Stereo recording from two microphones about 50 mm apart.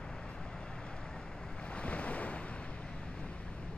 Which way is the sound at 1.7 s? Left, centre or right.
Left.